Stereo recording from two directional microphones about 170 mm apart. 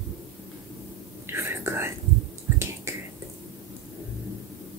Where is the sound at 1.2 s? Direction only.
15° right (ahead or behind).